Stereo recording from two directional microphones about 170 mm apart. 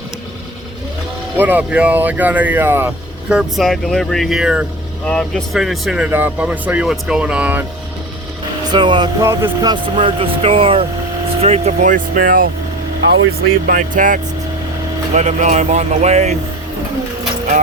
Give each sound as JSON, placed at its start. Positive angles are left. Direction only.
{"t": 1.4, "sound": "speech", "side_deg": -10}
{"t": 8.7, "sound": "speech", "side_deg": -25}
{"t": 13.7, "sound": "speech", "side_deg": -50}